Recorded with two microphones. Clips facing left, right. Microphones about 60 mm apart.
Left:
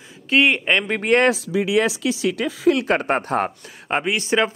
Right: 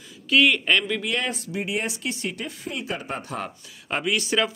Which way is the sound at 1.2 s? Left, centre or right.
Left.